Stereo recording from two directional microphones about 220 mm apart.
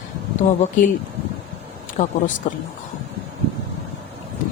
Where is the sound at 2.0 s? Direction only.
35° left (ahead or behind).